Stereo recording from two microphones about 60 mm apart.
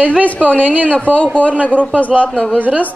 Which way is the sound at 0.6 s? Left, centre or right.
Right.